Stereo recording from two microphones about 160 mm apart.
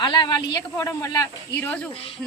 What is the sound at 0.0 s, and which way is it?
Speech, 30° left (ahead or behind).